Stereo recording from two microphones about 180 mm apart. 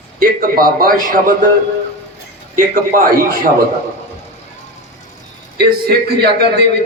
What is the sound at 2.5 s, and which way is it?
Speech, 50° right (ahead or behind).